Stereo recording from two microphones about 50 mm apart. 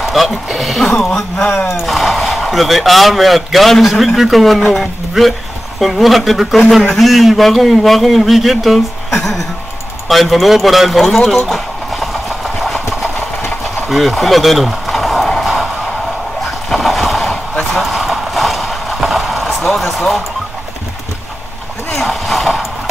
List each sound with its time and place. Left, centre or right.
0.1 s speech: centre
1.4 s speech: centre
1.7 s speech: centre
11.2 s engine: centre
13.8 s a sound: centre
21.9 s a sound: centre